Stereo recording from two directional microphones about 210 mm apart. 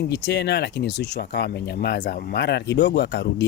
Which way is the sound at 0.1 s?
55° left (ahead or behind).